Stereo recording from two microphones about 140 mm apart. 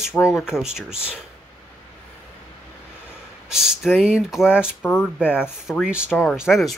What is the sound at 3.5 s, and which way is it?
Speech, 5° right (ahead or behind).